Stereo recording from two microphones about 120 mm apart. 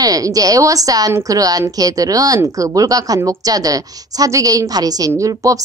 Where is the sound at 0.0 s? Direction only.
30° right (ahead or behind).